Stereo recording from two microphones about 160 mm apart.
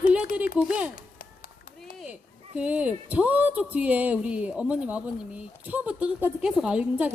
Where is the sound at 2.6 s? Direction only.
10° right (ahead or behind).